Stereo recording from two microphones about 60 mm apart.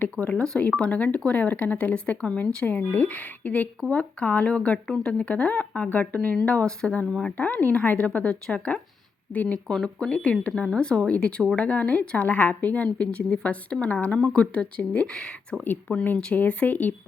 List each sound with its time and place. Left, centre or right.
0.0 s a woman's voice: left
6.3 s speech: centre
7.3 s a woman's voice: left
9.6 s a woman's voice: centre
15.9 s a woman's voice: left